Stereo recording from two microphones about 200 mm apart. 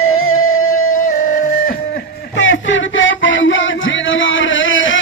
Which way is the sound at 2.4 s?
70° left (ahead or behind).